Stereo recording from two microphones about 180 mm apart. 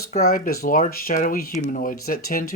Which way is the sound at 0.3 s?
55° left (ahead or behind).